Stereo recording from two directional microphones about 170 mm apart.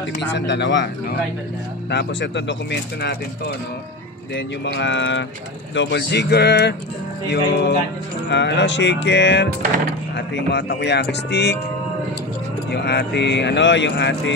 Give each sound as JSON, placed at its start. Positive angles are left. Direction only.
{"t": 0.2, "sound": "speech", "side_deg": 90}
{"t": 1.9, "sound": "speech", "side_deg": 85}
{"t": 4.6, "sound": "speech", "side_deg": 90}
{"t": 12.7, "sound": "speech", "side_deg": 75}